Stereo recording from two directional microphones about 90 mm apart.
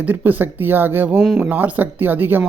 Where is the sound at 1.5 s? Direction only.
20° right (ahead or behind).